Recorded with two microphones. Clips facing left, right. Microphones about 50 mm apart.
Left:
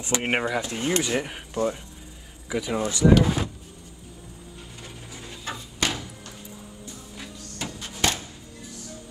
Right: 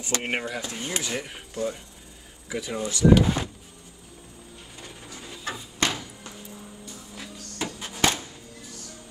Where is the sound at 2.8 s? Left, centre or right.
Left.